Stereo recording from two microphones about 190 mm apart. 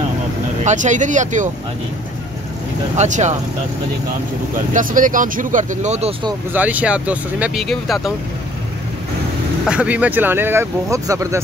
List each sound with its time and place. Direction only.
0.7 s speech: 40° right (ahead or behind)
3.0 s speech: 40° right (ahead or behind)
4.7 s speech: 45° right (ahead or behind)
6.5 s speech: 10° right (ahead or behind)
9.7 s speech: 5° right (ahead or behind)